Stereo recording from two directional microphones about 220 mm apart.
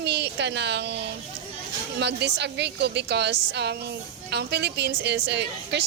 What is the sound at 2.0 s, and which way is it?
A woman's voice, 50° right (ahead or behind).